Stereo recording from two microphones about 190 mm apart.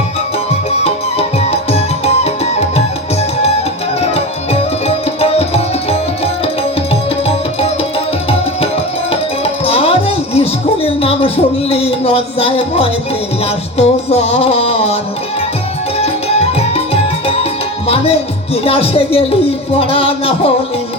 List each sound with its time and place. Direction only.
0.7 s music: 35° left (ahead or behind)
4.0 s tabla: 30° left (ahead or behind)
13.4 s music: 35° left (ahead or behind)
16.0 s music: 35° left (ahead or behind)
17.8 s speech: 30° left (ahead or behind)